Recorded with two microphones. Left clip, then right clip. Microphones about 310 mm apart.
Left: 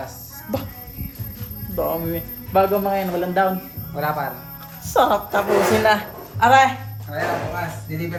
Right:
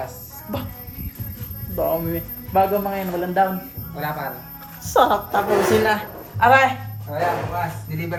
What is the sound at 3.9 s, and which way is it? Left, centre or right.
Speech, centre.